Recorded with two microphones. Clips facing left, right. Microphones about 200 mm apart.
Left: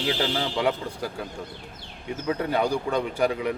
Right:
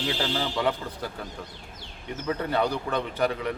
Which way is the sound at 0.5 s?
10° left (ahead or behind).